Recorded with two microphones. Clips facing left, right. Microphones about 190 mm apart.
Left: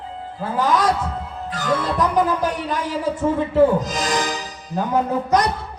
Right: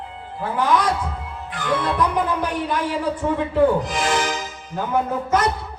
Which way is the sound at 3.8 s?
40° left (ahead or behind).